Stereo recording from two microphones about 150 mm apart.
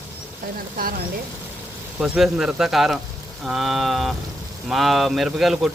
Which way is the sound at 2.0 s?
5° right (ahead or behind).